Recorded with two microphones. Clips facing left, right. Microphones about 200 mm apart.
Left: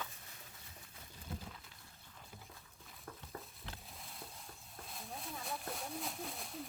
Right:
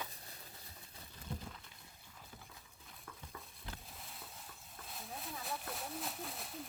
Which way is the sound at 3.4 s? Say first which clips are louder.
Even; centre (ahead or behind).